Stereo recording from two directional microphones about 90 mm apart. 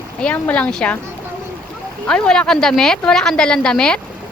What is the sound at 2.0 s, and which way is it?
A woman's voice, 10° left (ahead or behind).